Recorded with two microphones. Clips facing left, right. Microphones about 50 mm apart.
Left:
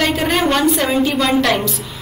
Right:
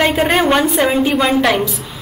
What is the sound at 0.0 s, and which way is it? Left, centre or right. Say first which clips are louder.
A woman's voice: right 3 dB; right.